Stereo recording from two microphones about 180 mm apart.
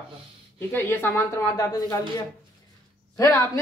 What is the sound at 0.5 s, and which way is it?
Speech, 10° left (ahead or behind).